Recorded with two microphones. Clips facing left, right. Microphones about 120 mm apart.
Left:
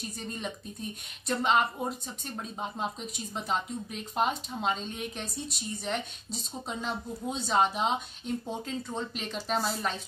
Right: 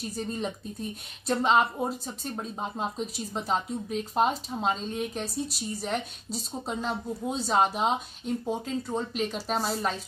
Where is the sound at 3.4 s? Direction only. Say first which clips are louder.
Right 2 dB; 35° right (ahead or behind).